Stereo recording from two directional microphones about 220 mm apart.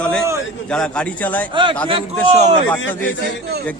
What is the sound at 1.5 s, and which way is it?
Speech, 20° right (ahead or behind).